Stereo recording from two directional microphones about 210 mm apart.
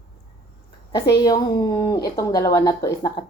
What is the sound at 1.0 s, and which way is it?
A woman's voice, 20° left (ahead or behind).